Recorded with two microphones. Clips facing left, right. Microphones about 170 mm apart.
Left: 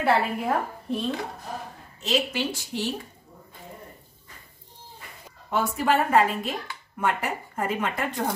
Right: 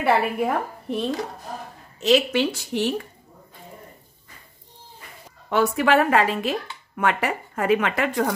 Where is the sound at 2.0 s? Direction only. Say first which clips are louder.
Right 7 dB; 75° right (ahead or behind).